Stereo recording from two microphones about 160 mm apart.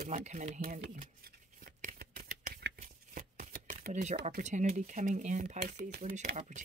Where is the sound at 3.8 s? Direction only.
50° right (ahead or behind).